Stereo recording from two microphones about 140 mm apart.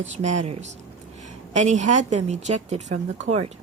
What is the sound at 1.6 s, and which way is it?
A woman's voice, 60° right (ahead or behind).